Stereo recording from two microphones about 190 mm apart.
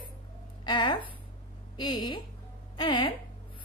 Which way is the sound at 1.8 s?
25° left (ahead or behind).